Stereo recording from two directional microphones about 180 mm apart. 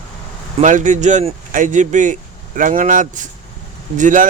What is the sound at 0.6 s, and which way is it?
Speech, 45° right (ahead or behind).